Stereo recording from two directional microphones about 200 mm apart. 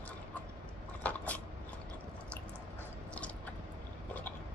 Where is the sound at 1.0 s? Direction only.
5° left (ahead or behind).